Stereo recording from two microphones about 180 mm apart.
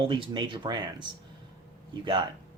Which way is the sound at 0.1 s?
25° right (ahead or behind).